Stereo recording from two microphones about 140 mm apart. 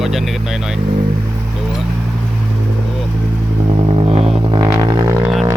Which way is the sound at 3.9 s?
45° right (ahead or behind).